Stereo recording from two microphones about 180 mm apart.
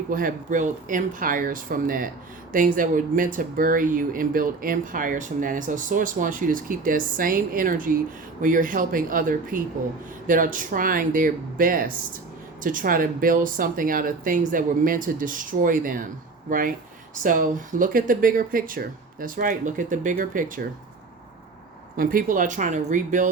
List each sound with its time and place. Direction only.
0.1 s speech: 50° right (ahead or behind)
21.9 s speech: 50° right (ahead or behind)